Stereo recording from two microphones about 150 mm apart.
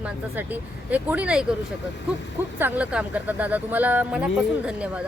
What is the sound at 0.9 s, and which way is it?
Speech, 10° right (ahead or behind).